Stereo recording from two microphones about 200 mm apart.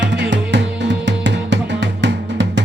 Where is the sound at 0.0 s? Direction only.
60° right (ahead or behind).